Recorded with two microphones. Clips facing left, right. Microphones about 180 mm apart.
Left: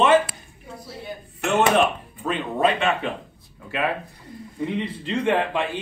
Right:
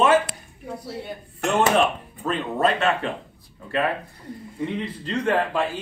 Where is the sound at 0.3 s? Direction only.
65° right (ahead or behind).